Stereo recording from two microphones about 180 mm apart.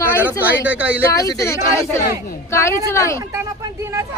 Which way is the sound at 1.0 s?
15° left (ahead or behind).